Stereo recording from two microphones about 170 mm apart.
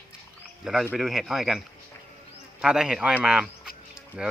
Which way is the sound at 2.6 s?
5° right (ahead or behind).